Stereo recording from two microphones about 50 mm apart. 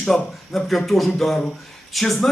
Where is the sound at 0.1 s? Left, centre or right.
Centre.